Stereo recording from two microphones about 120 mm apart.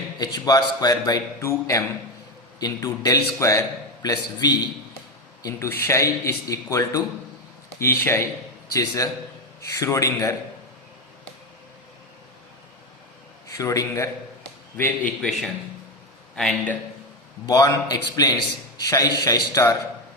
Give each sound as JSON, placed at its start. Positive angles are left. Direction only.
{"t": 0.2, "sound": "a man's voice", "side_deg": 30}
{"t": 13.5, "sound": "speech", "side_deg": 30}
{"t": 14.8, "sound": "a man's voice", "side_deg": 15}
{"t": 15.2, "sound": "a man's voice", "side_deg": 0}
{"t": 17.4, "sound": "speech", "side_deg": 30}